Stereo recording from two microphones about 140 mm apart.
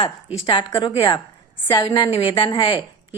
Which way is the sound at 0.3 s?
40° left (ahead or behind).